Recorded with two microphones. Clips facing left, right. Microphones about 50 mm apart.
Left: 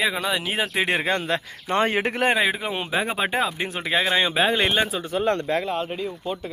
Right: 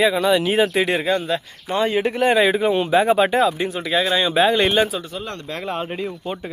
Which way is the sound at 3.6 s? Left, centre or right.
Left.